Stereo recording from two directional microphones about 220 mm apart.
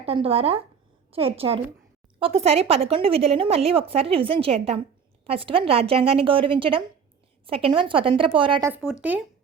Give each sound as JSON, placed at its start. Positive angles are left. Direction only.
{"t": 0.0, "sound": "a woman's voice", "side_deg": -25}
{"t": 8.9, "sound": "speech", "side_deg": -5}